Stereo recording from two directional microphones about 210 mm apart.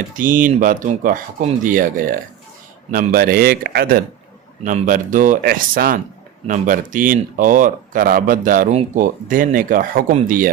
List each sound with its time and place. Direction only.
0.2 s speech: 40° right (ahead or behind)